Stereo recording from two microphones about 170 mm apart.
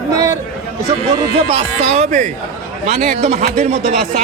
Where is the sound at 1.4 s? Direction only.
40° right (ahead or behind).